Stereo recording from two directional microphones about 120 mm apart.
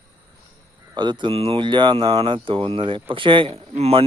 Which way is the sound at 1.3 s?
55° right (ahead or behind).